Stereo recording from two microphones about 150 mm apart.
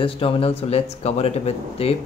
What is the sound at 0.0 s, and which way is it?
Speech, 40° left (ahead or behind).